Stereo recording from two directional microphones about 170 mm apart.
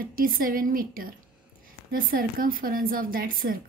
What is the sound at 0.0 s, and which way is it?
A woman's voice, 55° right (ahead or behind).